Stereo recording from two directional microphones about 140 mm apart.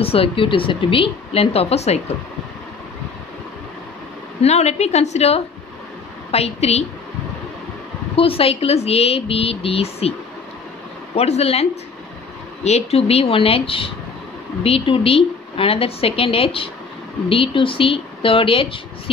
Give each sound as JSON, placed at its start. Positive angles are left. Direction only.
{"t": 0.0, "sound": "a woman's voice", "side_deg": 45}
{"t": 4.4, "sound": "a woman's voice", "side_deg": 50}
{"t": 8.2, "sound": "a woman's voice", "side_deg": 45}
{"t": 11.1, "sound": "a woman's voice", "side_deg": 50}